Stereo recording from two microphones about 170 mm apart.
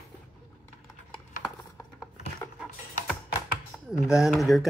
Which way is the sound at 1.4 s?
25° left (ahead or behind).